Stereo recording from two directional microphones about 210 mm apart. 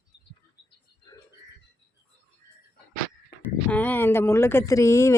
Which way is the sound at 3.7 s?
10° left (ahead or behind).